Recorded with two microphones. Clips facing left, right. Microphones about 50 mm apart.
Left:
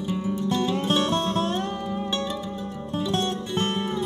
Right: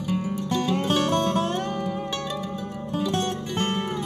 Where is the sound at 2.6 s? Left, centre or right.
Right.